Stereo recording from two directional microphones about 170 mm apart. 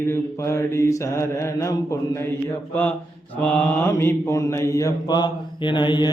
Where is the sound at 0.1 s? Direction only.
15° left (ahead or behind).